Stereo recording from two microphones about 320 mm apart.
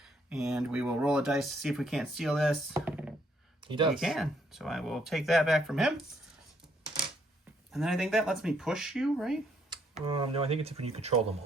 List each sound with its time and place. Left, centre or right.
0.0 s speech: centre
3.9 s speech: centre
7.7 s speech: centre
9.6 s speech: centre